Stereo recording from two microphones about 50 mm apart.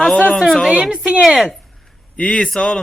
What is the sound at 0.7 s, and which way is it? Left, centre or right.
Speech, centre.